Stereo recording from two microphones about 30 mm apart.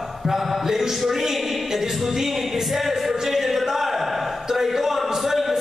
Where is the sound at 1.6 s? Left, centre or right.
Centre.